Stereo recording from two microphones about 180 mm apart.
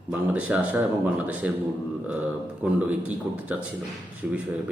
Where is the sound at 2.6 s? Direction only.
5° right (ahead or behind).